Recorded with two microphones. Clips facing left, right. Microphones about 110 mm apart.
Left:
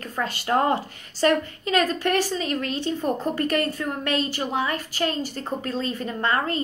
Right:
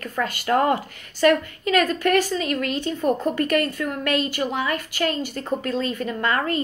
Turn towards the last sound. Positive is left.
turn(degrees=30)  # may be behind; listen again after turning